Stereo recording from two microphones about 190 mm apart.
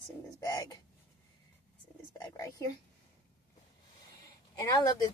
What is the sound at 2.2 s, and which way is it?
Speech, 20° left (ahead or behind).